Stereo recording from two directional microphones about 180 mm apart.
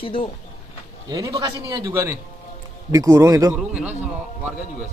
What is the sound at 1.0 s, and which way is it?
Speech, 20° right (ahead or behind).